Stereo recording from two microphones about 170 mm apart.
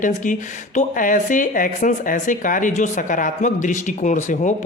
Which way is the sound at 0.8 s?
50° left (ahead or behind).